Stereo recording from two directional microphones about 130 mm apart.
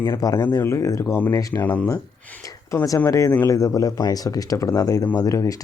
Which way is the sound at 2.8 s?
25° left (ahead or behind).